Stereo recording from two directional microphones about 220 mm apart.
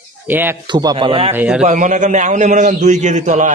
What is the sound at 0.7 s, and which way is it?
Speech, 20° right (ahead or behind).